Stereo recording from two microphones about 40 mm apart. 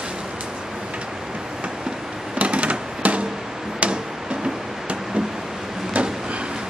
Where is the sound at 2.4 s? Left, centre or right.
Right.